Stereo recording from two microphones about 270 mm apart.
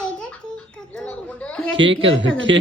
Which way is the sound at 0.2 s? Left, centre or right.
Centre.